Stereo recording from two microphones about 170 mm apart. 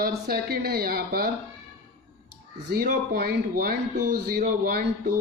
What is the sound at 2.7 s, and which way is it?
Speech, 60° right (ahead or behind).